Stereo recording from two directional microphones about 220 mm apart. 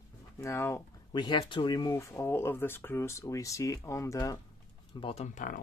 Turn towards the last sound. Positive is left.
turn(degrees=30)  # may be behind; listen again after turning